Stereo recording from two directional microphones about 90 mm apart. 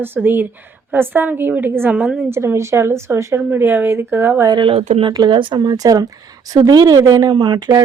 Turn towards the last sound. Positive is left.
turn(degrees=-55)  # may be behind; listen again after turning